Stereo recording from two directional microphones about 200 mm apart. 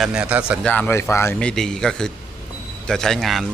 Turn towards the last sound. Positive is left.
turn(degrees=0)  # may be behind; listen again after turning